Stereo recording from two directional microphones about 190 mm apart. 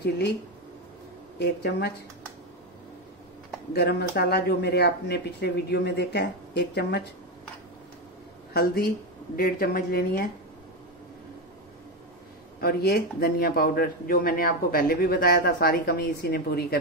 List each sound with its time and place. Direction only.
1.4 s speech: 60° left (ahead or behind)
3.7 s speech: 55° left (ahead or behind)
8.5 s speech: 55° left (ahead or behind)
12.5 s speech: 55° left (ahead or behind)